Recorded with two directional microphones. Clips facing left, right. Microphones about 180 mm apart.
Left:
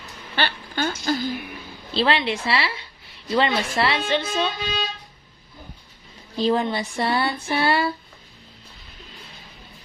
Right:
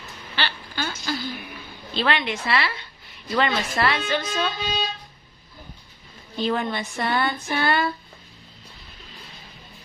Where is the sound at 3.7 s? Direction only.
30° left (ahead or behind).